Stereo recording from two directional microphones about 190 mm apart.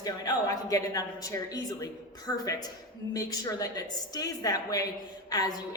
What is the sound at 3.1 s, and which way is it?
A man's voice, 20° left (ahead or behind).